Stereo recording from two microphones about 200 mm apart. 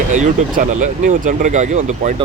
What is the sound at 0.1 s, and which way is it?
Speech, 40° right (ahead or behind).